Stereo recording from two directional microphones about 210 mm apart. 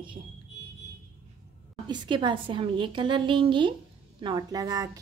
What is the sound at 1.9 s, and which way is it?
A woman's voice, 20° right (ahead or behind).